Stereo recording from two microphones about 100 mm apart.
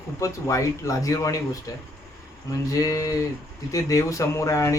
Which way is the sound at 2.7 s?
35° left (ahead or behind).